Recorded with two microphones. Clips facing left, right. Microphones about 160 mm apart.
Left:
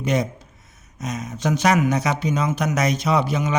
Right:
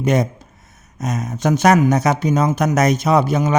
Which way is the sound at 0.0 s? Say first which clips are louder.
Right 5 dB; 50° right (ahead or behind).